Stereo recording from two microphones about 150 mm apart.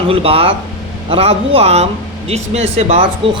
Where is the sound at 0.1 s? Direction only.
40° right (ahead or behind).